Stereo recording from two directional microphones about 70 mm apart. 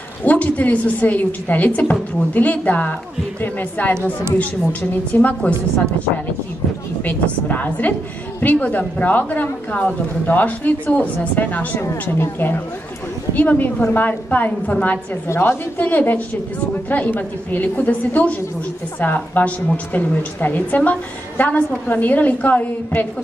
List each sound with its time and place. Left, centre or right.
0.2 s a woman's voice: left
5.1 s a woman's voice: left
7.1 s a woman's voice: left
15.2 s speech: left
15.8 s a woman's voice: left